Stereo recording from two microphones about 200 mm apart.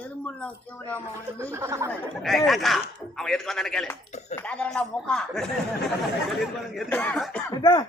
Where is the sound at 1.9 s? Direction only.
Centre (ahead or behind).